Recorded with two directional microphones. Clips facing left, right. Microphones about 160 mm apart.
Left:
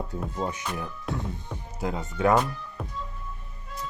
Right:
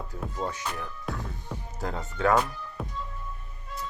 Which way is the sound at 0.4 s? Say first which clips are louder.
Left 2 dB; 20° left (ahead or behind).